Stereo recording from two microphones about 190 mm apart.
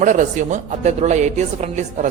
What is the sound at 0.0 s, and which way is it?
A woman's voice, 40° right (ahead or behind).